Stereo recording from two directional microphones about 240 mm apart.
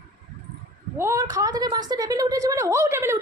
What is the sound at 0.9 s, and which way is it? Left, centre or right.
A woman's voice, centre.